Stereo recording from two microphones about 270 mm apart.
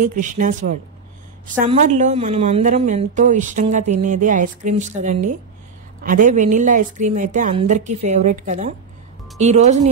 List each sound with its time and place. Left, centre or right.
0.0 s speech: right